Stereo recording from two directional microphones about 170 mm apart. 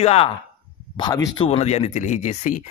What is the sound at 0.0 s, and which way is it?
Speech, 35° left (ahead or behind).